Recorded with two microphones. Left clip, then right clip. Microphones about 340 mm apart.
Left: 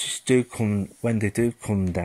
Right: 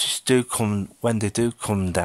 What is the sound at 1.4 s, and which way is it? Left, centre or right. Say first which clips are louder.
Speech: right 1 dB; right.